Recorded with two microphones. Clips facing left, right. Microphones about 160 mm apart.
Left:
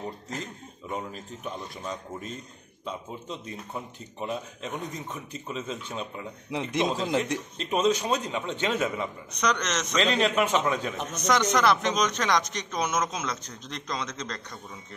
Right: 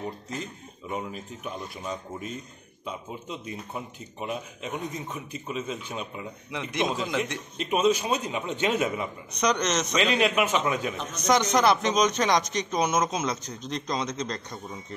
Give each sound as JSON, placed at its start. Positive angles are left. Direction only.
{"t": 0.8, "sound": "a man's voice", "side_deg": -10}
{"t": 6.5, "sound": "a man's voice", "side_deg": 30}
{"t": 7.5, "sound": "a man's voice", "side_deg": -5}